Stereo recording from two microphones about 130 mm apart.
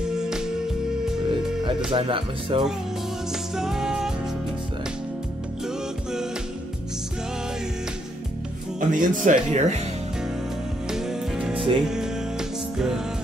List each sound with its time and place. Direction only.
1.9 s speech: 40° right (ahead or behind)
3.5 s music: 5° right (ahead or behind)
8.7 s speech: 80° right
10.9 s music: 5° right (ahead or behind)
11.5 s music: 40° right (ahead or behind)
11.8 s music: 5° right (ahead or behind)